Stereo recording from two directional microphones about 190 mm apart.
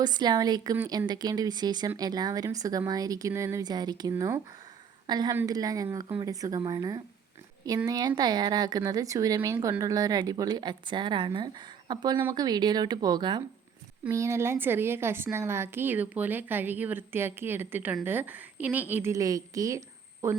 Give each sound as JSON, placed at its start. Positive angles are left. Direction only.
{"t": 0.0, "sound": "a woman's voice", "side_deg": -20}